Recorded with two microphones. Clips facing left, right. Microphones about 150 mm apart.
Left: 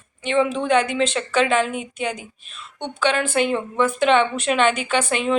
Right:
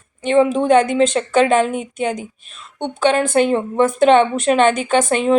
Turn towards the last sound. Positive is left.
turn(degrees=-45)  # may be behind; listen again after turning